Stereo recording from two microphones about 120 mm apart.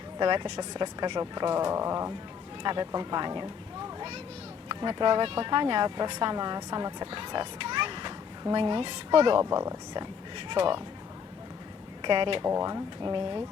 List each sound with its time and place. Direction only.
0.2 s speech: 40° right (ahead or behind)
2.6 s speech: 35° right (ahead or behind)
4.7 s speech: 40° right (ahead or behind)
9.4 s speech: 25° right (ahead or behind)
10.3 s speech: 45° right (ahead or behind)
12.0 s speech: 40° right (ahead or behind)
12.5 s speech: 30° right (ahead or behind)